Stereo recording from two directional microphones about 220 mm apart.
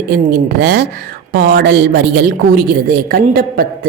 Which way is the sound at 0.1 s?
45° right (ahead or behind).